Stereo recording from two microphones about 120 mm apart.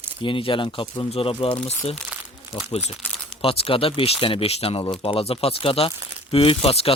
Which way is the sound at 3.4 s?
55° left (ahead or behind).